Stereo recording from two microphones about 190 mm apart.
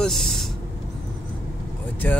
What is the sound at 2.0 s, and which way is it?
Speech, 10° left (ahead or behind).